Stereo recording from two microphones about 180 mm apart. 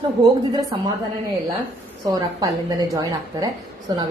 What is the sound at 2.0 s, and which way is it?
A woman's voice, 20° right (ahead or behind).